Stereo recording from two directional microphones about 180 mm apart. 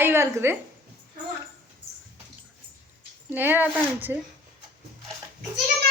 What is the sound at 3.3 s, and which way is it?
Speech, 10° right (ahead or behind).